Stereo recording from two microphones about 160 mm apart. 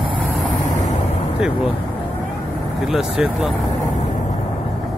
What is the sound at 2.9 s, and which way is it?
Speech, 5° right (ahead or behind).